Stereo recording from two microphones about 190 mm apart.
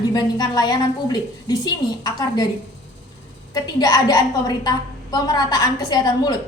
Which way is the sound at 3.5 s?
20° left (ahead or behind).